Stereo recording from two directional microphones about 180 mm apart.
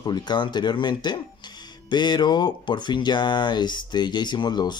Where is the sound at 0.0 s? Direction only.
25° left (ahead or behind).